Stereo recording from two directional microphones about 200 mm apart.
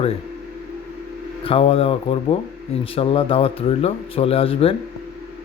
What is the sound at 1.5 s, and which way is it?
A man's voice, 30° left (ahead or behind).